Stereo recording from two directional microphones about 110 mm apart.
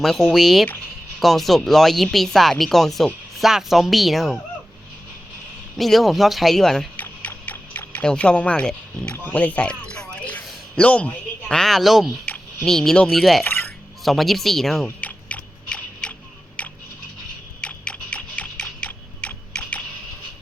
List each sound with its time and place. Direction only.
0.0 s speech: centre (ahead or behind)
5.7 s speech: centre (ahead or behind)
6.9 s tick-tock: 15° left (ahead or behind)
8.0 s speech: 10° left (ahead or behind)
9.1 s a sound: 15° left (ahead or behind)
10.8 s a man's voice: 10° left (ahead or behind)
12.2 s a sound: 15° left (ahead or behind)
12.6 s speech: 5° left (ahead or behind)
13.4 s speech: 15° left (ahead or behind)
14.0 s speech: centre (ahead or behind)
14.8 s biting: 15° left (ahead or behind)
16.6 s a sound: 10° left (ahead or behind)
17.6 s tick-tock: 10° left (ahead or behind)